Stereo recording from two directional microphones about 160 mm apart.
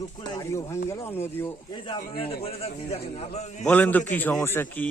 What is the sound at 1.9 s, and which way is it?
A man's voice, 35° left (ahead or behind).